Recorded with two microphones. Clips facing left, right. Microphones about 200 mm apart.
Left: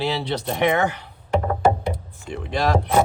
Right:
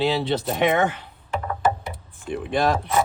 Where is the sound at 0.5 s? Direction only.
20° right (ahead or behind).